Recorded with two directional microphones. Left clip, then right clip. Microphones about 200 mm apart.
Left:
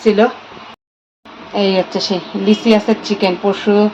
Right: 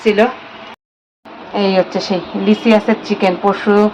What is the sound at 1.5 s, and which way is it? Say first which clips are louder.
A woman's voice: right 1 dB; centre (ahead or behind).